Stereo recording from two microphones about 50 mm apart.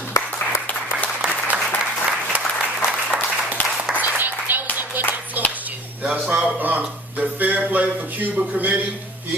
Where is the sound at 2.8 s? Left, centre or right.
Left.